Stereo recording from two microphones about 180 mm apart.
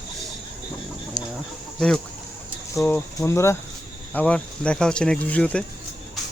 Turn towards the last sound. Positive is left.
turn(degrees=5)  # may be behind; listen again after turning